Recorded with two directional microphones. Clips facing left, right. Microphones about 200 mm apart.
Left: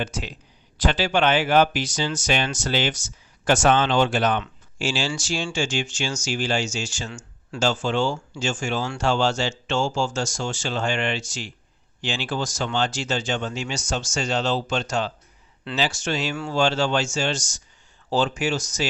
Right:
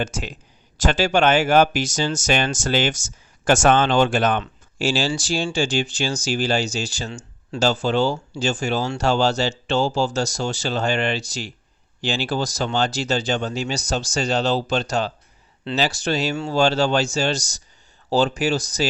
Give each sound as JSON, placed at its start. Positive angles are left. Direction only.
{"t": 0.0, "sound": "speech", "side_deg": -45}
{"t": 16.3, "sound": "speech", "side_deg": -25}
{"t": 16.6, "sound": "speech", "side_deg": -40}